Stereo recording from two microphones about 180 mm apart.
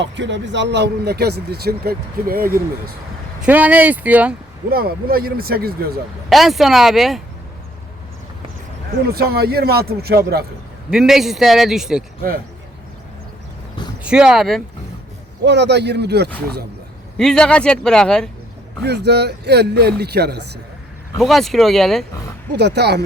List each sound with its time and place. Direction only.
0.0 s speech: 80° right; by 2.6 s 55° right (ahead or behind)
3.4 s speech: 10° right (ahead or behind)
4.7 s speech: 55° right (ahead or behind)
6.2 s a man's voice: centre (ahead or behind)
9.0 s speech: 60° right (ahead or behind)
10.9 s a man's voice: centre (ahead or behind)
14.0 s speech: 5° right (ahead or behind)
15.4 s speech: 70° right (ahead or behind)
17.2 s a man's voice: 5° left (ahead or behind)
18.8 s speech: 70° right (ahead or behind)
21.2 s a man's voice: centre (ahead or behind)
22.5 s speech: 70° right (ahead or behind)